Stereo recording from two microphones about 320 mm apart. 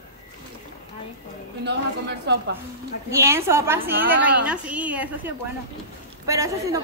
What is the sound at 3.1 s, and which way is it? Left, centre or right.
A woman's voice, centre.